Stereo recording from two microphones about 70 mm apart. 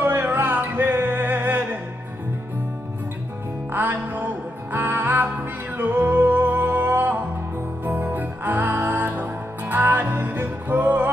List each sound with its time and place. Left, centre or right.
0.0 s music: right
3.7 s music: right